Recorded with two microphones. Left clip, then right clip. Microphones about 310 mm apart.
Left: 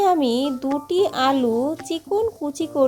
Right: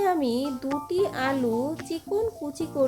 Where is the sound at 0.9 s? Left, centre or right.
Left.